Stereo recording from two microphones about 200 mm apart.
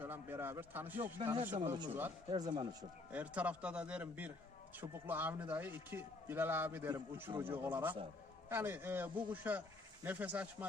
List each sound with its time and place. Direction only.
0.0 s speech: 10° right (ahead or behind)
1.2 s speech: 25° right (ahead or behind)
1.6 s speech: 15° right (ahead or behind)
3.1 s a man's voice: 5° right (ahead or behind)